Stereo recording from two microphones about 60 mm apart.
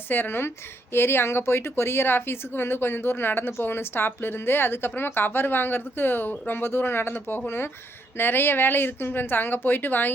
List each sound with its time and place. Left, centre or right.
0.1 s a woman's voice: left